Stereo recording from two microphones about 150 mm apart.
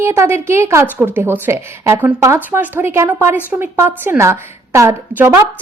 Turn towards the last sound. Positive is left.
turn(degrees=-20)  # may be behind; listen again after turning